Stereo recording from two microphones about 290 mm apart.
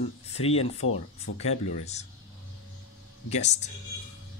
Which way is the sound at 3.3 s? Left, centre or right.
Left.